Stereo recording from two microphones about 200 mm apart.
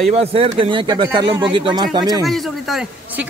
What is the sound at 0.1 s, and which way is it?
Speech, 30° right (ahead or behind).